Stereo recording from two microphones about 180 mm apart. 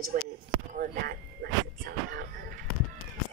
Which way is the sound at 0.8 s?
55° right (ahead or behind).